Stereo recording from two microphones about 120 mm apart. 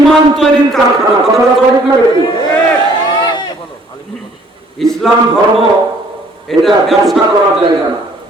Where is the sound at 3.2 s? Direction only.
35° left (ahead or behind).